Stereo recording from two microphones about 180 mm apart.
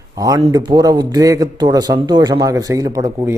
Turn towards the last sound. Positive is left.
turn(degrees=-20)  # may be behind; listen again after turning